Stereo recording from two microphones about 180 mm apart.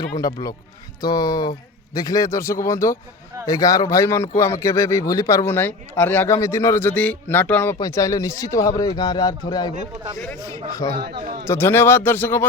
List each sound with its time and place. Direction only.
0.2 s a man's voice: 20° left (ahead or behind)
10.9 s speech: 60° right (ahead or behind)
11.4 s speech: 15° left (ahead or behind)